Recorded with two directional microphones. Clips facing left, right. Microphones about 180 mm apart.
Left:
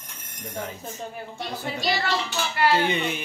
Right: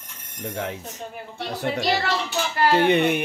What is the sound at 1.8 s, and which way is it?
Speech, 45° right (ahead or behind).